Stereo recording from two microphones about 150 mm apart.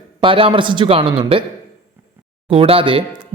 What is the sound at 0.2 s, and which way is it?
Speech, 35° right (ahead or behind).